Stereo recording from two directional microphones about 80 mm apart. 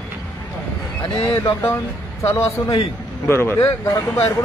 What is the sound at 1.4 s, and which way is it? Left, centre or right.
Speech, left.